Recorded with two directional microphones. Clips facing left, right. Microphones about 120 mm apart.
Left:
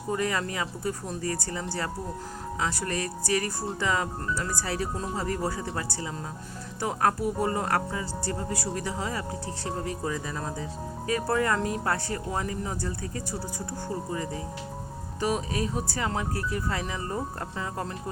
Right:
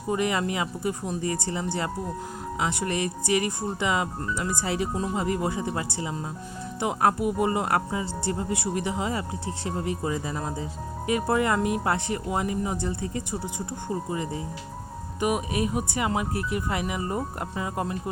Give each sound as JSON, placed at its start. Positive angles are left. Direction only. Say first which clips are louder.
{"t": 0.1, "sound": "speech", "louder": "right 3 dB", "side_deg": -20}
{"t": 15.2, "sound": "speech", "louder": "right 2 dB", "side_deg": -15}